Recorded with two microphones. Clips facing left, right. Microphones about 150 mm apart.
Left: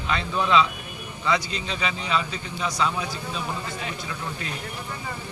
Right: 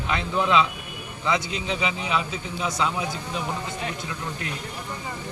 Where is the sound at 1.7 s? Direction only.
20° right (ahead or behind).